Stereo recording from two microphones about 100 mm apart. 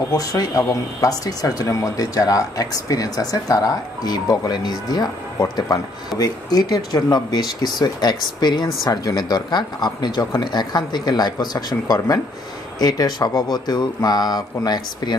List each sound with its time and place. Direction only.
0.1 s speech: 40° left (ahead or behind)
6.1 s speech: 40° left (ahead or behind)